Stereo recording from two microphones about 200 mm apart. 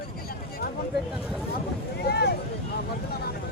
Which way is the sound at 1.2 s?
5° right (ahead or behind).